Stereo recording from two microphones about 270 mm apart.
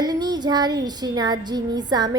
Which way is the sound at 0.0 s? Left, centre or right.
Centre.